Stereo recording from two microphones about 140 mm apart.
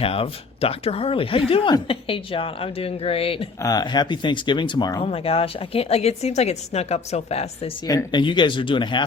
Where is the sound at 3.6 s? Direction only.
30° left (ahead or behind).